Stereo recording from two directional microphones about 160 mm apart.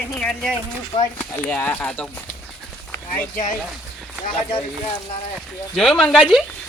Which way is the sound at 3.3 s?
60° left (ahead or behind).